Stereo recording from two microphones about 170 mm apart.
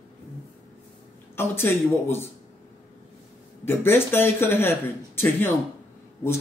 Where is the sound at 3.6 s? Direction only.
15° left (ahead or behind).